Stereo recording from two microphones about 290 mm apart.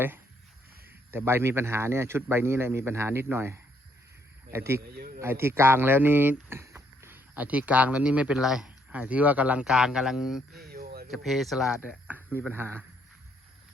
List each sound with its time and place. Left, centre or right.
1.1 s a man's voice: centre
4.9 s speech: right
5.2 s speech: centre
10.7 s a sound: right
11.1 s speech: centre